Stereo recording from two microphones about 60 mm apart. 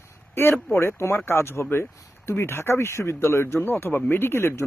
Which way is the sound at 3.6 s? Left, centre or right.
Left.